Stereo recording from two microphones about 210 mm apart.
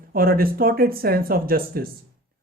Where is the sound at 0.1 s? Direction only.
45° right (ahead or behind).